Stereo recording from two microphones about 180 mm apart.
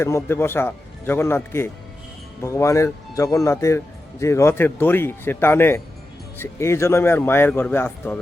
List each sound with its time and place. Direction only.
0.3 s speech: 15° left (ahead or behind)